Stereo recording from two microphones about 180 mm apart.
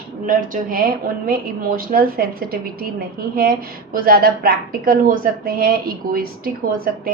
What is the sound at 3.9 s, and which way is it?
A woman's voice, 55° right (ahead or behind).